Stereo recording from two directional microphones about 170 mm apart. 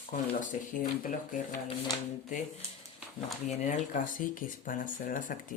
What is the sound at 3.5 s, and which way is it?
Speech, 45° left (ahead or behind).